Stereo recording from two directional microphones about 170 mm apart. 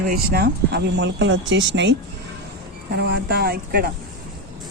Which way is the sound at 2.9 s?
75° right (ahead or behind).